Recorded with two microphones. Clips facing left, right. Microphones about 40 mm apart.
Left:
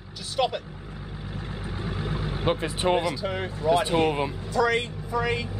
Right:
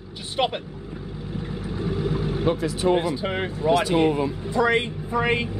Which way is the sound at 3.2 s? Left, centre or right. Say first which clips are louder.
Right 3 dB; right.